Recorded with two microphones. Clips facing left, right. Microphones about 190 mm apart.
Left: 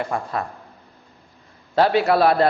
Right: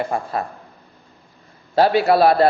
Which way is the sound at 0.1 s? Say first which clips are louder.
Right 2 dB; 30° right (ahead or behind).